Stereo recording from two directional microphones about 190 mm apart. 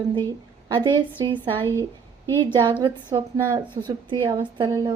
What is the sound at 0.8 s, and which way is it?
Speech, 25° right (ahead or behind).